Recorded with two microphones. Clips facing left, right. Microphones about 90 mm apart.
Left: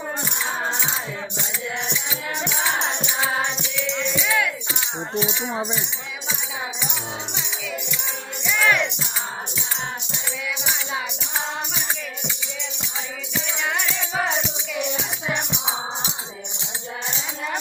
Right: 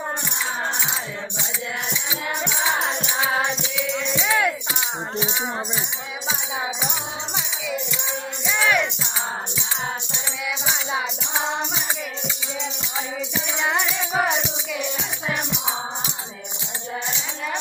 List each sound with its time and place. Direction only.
2.6 s music: 10° right (ahead or behind); by 4.5 s 30° right (ahead or behind)
7.3 s music: 10° right (ahead or behind)
10.6 s music: 25° right (ahead or behind)
13.6 s music: 20° right (ahead or behind)